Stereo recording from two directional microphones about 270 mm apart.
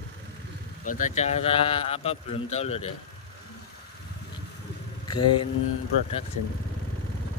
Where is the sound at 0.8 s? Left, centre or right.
Left.